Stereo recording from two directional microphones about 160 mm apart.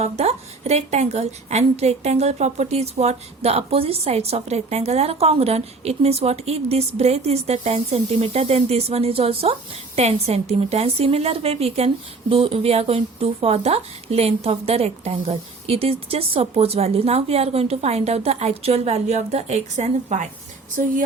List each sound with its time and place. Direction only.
0.0 s a woman's voice: 40° right (ahead or behind)